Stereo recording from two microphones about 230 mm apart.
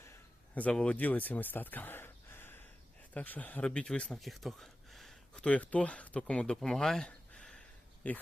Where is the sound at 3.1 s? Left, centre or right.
Centre.